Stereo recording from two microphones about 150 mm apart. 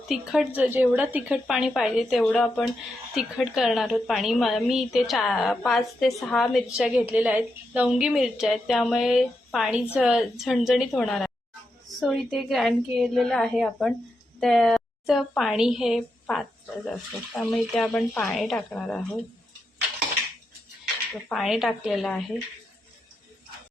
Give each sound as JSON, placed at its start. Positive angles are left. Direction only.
{"t": 0.1, "sound": "a woman's voice", "side_deg": -5}
{"t": 21.2, "sound": "a woman's voice", "side_deg": 0}